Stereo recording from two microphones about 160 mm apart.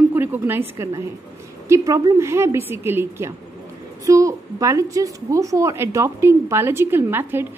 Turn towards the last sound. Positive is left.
turn(degrees=-15)  # may be behind; listen again after turning